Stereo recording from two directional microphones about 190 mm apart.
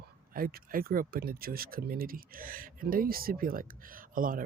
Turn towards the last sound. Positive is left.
turn(degrees=-45)  # may be behind; listen again after turning